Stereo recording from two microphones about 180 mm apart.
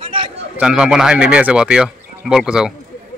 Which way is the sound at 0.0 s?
30° right (ahead or behind).